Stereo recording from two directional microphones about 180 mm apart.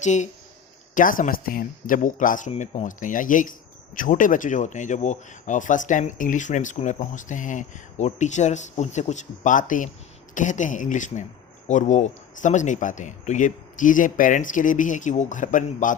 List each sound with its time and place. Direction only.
0.0 s speech: 40° left (ahead or behind)